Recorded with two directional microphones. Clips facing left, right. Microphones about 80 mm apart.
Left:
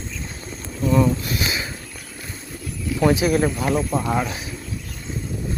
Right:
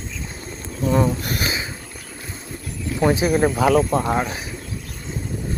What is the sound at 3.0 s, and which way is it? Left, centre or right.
Speech, right.